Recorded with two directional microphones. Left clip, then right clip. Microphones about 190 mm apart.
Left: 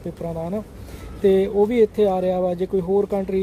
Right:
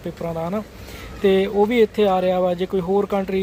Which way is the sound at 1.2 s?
10° left (ahead or behind).